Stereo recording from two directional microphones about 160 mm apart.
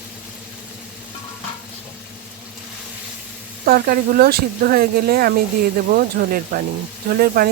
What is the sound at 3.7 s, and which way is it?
Speech, 70° right (ahead or behind).